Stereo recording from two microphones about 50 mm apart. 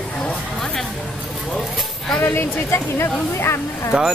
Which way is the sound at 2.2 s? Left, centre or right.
Left.